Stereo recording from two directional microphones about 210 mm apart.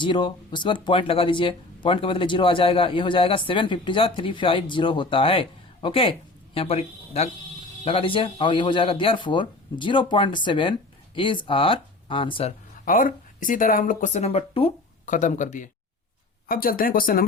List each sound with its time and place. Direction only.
0.0 s speech: 25° left (ahead or behind)
12.8 s speech: 40° left (ahead or behind)